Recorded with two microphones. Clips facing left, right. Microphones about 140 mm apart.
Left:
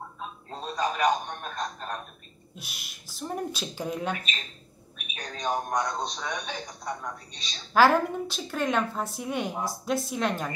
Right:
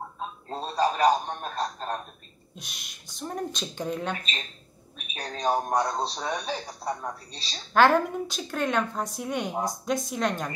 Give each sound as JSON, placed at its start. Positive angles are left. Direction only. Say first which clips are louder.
{"t": 0.5, "sound": "a man's voice", "louder": "right 4 dB", "side_deg": -35}
{"t": 2.5, "sound": "speech", "louder": "even", "side_deg": 5}
{"t": 4.9, "sound": "a man's voice", "louder": "right 3 dB", "side_deg": -35}
{"t": 7.7, "sound": "speech", "louder": "even", "side_deg": 0}